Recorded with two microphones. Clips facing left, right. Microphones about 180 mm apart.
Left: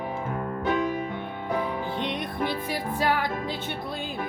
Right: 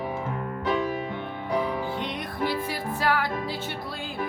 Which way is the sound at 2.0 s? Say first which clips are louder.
Left 1 dB; 20° left (ahead or behind).